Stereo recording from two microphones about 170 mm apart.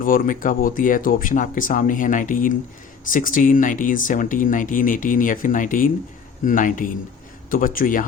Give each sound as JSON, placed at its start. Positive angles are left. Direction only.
{"t": 0.0, "sound": "speech", "side_deg": 55}